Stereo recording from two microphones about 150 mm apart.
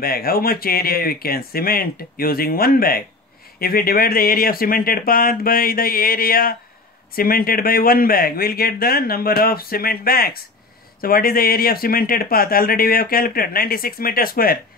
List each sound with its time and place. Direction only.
0.0 s speech: 90° left
11.0 s speech: 75° left (ahead or behind)